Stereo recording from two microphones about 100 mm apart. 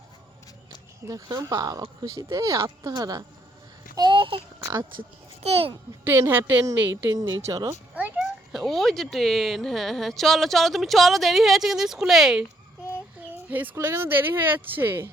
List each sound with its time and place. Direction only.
1.0 s speech: 40° right (ahead or behind)
2.6 s speech: 45° right (ahead or behind)
3.9 s child singing: 50° right (ahead or behind)
5.4 s a child's voice: 85° right
6.1 s speech: 25° right (ahead or behind)
6.9 s speech: 35° right (ahead or behind)
7.9 s a sound: 15° right (ahead or behind)
8.2 s speech: centre (ahead or behind)
13.5 s speech: 20° right (ahead or behind)